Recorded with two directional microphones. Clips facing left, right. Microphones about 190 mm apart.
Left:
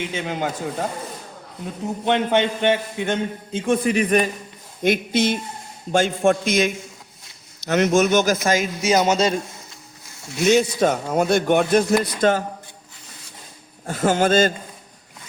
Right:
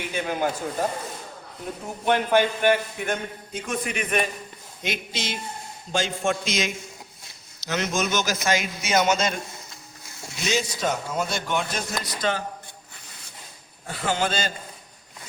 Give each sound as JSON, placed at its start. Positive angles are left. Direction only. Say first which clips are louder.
{"t": 0.1, "sound": "a man's voice", "louder": "even", "side_deg": 20}
{"t": 2.0, "sound": "a man's voice", "louder": "left 1 dB", "side_deg": 20}
{"t": 4.8, "sound": "a man's voice", "louder": "left 12 dB", "side_deg": 55}
{"t": 10.4, "sound": "a man's voice", "louder": "left 9 dB", "side_deg": 55}
{"t": 13.8, "sound": "a man's voice", "louder": "left 7 dB", "side_deg": 45}